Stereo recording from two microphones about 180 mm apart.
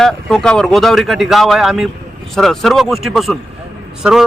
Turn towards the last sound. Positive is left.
turn(degrees=-5)  # may be behind; listen again after turning